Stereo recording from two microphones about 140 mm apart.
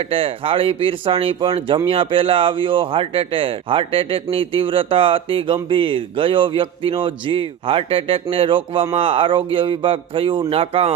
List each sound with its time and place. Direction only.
0.0 s speech: 40° right (ahead or behind)